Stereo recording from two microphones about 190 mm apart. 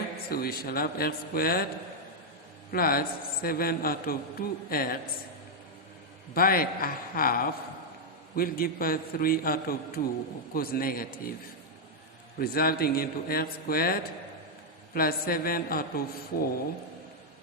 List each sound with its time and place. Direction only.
0.3 s a man's voice: 55° left (ahead or behind)
2.7 s a man's voice: 50° left (ahead or behind)
6.3 s a man's voice: 50° left (ahead or behind)
12.4 s a man's voice: 50° left (ahead or behind)